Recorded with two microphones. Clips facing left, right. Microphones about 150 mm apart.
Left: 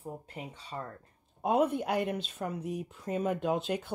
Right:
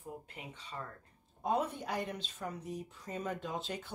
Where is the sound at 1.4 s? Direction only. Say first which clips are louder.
Left 7 dB; 65° left (ahead or behind).